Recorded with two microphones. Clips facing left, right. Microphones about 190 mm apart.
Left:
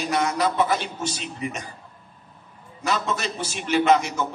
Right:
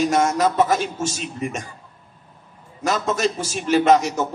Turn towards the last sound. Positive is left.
turn(degrees=-40)  # may be behind; listen again after turning